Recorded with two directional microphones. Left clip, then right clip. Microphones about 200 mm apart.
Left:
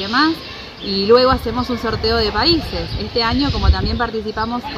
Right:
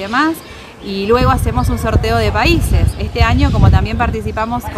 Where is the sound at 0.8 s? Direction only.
30° right (ahead or behind).